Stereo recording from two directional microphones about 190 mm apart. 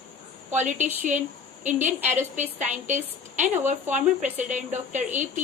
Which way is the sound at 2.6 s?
40° right (ahead or behind).